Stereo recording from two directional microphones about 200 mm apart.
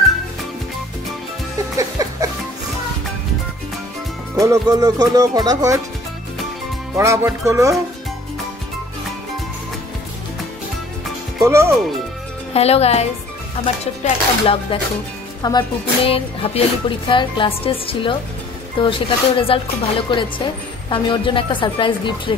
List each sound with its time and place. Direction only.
1.8 s music: 15° right (ahead or behind)
4.4 s speech: 15° right (ahead or behind)
7.0 s speech: 15° right (ahead or behind)
11.4 s speech: 15° right (ahead or behind)
12.5 s a woman's voice: 30° left (ahead or behind)
14.0 s speech: 25° left (ahead or behind)